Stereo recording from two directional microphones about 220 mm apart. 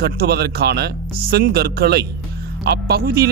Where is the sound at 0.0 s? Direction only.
45° right (ahead or behind).